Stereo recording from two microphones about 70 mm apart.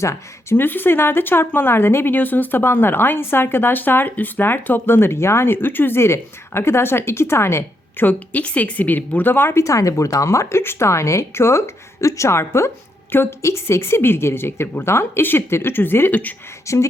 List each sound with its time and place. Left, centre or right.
0.0 s speech: left
0.5 s a woman's voice: left
8.0 s a woman's voice: left
9.6 s a woman's voice: left
16.7 s speech: left